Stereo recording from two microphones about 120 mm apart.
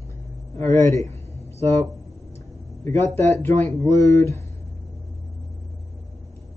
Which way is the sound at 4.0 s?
25° left (ahead or behind).